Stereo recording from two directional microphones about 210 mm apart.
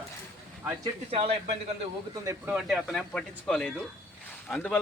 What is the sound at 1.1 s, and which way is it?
Speech, 30° right (ahead or behind).